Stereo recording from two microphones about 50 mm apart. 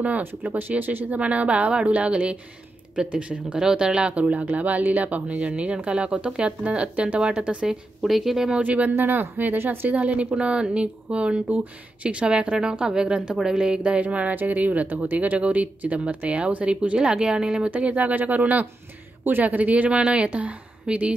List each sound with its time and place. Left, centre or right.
0.2 s a woman's voice: right; by 4.1 s centre
4.1 s a woman's voice: right
8.0 s speech: centre
8.5 s speech: right
8.9 s speech: right
9.9 s a woman's voice: right
17.6 s a woman's voice: right